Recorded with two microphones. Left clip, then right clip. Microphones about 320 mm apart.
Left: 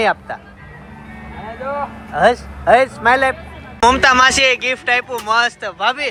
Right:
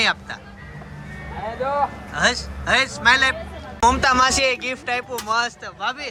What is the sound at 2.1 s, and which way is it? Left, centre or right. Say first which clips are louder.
A man's voice: left 11 dB; centre.